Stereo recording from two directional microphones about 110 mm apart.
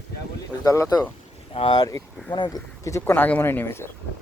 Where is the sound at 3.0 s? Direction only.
15° left (ahead or behind).